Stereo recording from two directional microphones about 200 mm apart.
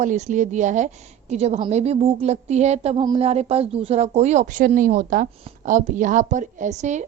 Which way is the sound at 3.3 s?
30° right (ahead or behind).